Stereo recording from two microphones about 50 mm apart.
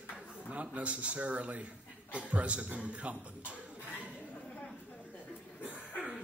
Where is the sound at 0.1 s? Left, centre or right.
Right.